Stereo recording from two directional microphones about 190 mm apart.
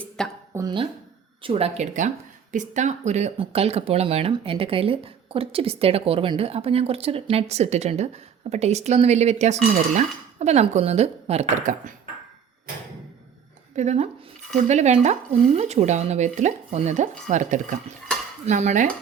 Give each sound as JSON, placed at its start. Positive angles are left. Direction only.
{"t": 0.2, "sound": "speech", "side_deg": 0}
{"t": 0.5, "sound": "speech", "side_deg": -20}
{"t": 13.7, "sound": "speech", "side_deg": -35}